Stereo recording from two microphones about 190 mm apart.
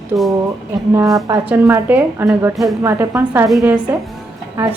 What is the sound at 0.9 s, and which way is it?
A woman's voice, 20° right (ahead or behind).